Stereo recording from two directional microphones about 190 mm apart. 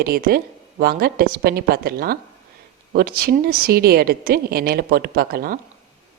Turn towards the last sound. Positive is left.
turn(degrees=-50)  # may be behind; listen again after turning